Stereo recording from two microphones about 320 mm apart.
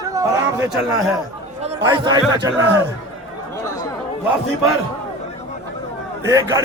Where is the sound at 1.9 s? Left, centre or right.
Centre.